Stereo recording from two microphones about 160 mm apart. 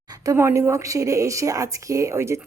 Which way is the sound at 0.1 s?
20° right (ahead or behind).